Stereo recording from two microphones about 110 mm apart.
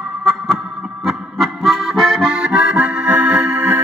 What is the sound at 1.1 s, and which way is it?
Accordion, centre (ahead or behind).